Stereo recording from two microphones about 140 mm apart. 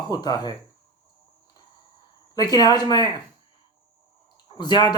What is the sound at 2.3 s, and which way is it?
Speech, 25° left (ahead or behind).